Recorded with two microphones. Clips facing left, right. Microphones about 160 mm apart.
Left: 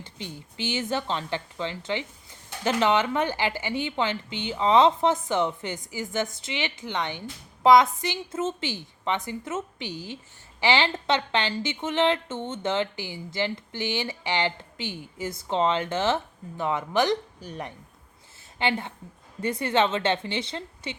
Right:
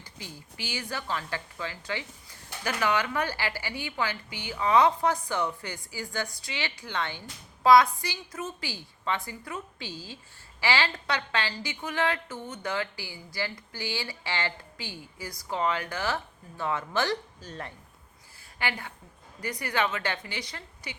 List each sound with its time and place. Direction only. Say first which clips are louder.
0.0 s speech: left 6 dB; 25° left (ahead or behind)